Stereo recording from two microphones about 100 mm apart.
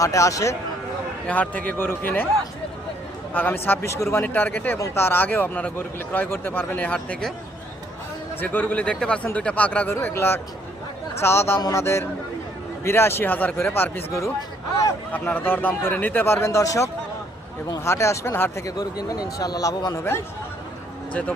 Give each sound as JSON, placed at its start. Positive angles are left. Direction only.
{"t": 0.0, "sound": "a man's voice", "side_deg": 30}
{"t": 1.3, "sound": "speech", "side_deg": 15}
{"t": 3.3, "sound": "a man's voice", "side_deg": 20}
{"t": 8.4, "sound": "a man's voice", "side_deg": 20}
{"t": 9.9, "sound": "speech", "side_deg": 25}
{"t": 15.4, "sound": "speech", "side_deg": 20}
{"t": 18.6, "sound": "a man's voice", "side_deg": 40}
{"t": 21.1, "sound": "speech", "side_deg": 15}